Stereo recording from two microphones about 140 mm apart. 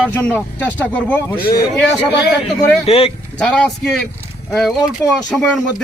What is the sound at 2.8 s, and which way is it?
Speech, 45° left (ahead or behind).